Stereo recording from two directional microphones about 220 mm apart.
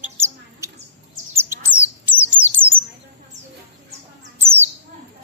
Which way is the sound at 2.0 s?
55° left (ahead or behind).